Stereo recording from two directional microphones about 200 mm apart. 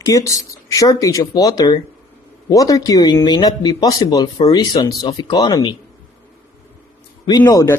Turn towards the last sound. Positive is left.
turn(degrees=15)  # may be behind; listen again after turning